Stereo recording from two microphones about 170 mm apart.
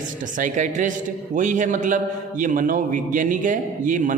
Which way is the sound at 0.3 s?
50° right (ahead or behind).